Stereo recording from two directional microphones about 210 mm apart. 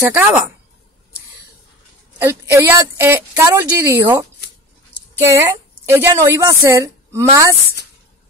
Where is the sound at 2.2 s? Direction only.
10° right (ahead or behind).